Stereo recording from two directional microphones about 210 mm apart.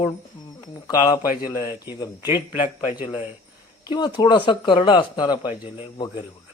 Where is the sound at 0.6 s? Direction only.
20° left (ahead or behind).